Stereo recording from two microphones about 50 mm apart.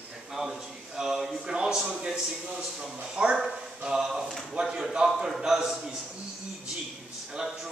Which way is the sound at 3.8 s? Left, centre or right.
Centre.